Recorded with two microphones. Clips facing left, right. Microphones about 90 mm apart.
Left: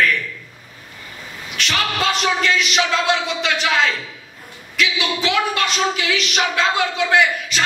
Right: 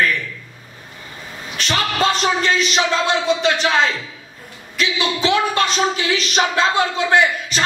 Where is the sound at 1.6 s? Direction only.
35° right (ahead or behind).